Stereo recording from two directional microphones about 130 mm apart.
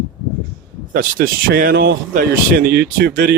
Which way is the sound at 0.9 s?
90° right.